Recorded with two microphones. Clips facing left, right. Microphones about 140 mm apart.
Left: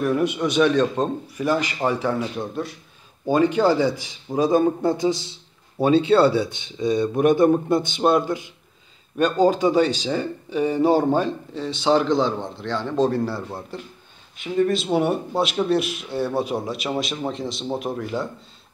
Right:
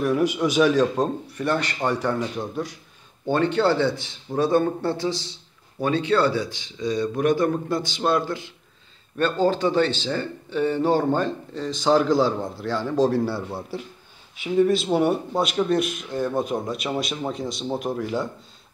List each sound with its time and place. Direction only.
0.0 s a man's voice: centre (ahead or behind)